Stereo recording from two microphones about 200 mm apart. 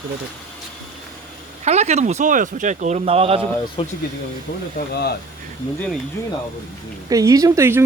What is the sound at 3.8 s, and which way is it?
Speech, 25° left (ahead or behind).